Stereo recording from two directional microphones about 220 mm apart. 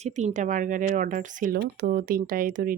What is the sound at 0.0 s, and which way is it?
A woman's voice, 30° right (ahead or behind).